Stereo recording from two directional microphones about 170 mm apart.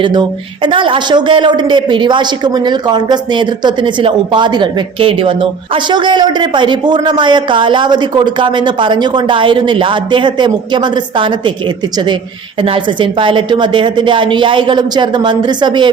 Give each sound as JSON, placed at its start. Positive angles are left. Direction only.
{"t": 0.0, "sound": "a woman's voice", "side_deg": -25}
{"t": 12.6, "sound": "a woman's voice", "side_deg": -30}